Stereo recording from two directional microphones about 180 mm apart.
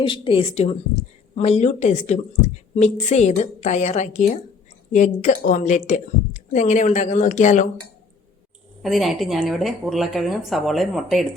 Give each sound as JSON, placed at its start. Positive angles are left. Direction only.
{"t": 0.0, "sound": "a woman's voice", "side_deg": 30}
{"t": 8.8, "sound": "speech", "side_deg": 0}